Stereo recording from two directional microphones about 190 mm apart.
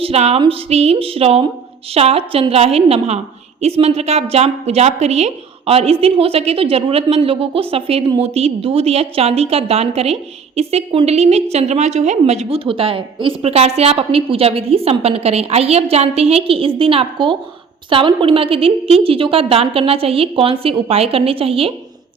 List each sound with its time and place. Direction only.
0.0 s a woman's voice: 30° right (ahead or behind)